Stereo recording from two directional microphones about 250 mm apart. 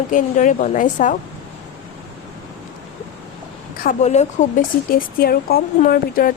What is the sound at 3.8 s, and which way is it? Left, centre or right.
A woman's voice, left.